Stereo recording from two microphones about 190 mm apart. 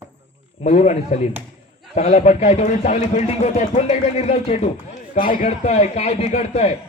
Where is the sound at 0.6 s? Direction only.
35° left (ahead or behind).